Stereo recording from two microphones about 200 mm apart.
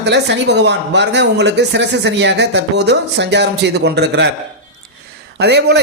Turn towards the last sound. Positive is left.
turn(degrees=-55)  # may be behind; listen again after turning